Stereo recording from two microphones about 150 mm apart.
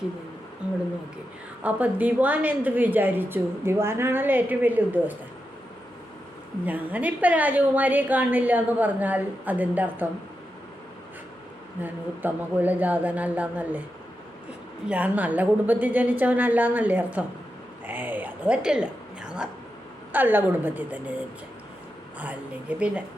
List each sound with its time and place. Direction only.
1.6 s a woman's voice: 10° right (ahead or behind)
6.7 s a woman's voice: 10° right (ahead or behind)
11.8 s a woman's voice: 10° right (ahead or behind)
14.8 s a woman's voice: 10° right (ahead or behind)
17.8 s a sound: 10° right (ahead or behind)
20.1 s a woman's voice: 15° right (ahead or behind)
22.7 s a woman's voice: 10° right (ahead or behind)